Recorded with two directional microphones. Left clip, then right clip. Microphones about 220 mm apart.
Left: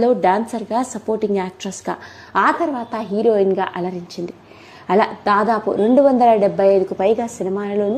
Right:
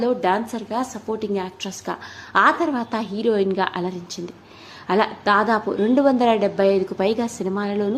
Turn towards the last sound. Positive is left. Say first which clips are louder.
# left 4 dB
turn(degrees=0)  # may be behind; listen again after turning